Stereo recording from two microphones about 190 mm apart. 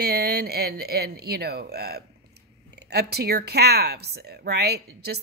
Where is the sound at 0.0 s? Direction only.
55° right (ahead or behind).